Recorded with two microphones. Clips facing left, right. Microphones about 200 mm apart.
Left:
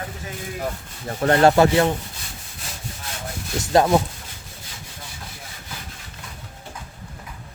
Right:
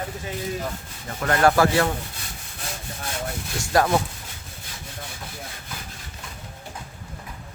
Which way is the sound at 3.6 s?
20° left (ahead or behind).